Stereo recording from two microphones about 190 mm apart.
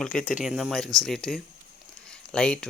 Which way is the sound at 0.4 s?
Centre (ahead or behind).